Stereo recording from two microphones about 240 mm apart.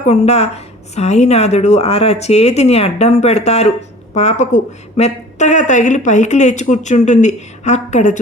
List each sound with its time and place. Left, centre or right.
0.1 s a woman's voice: left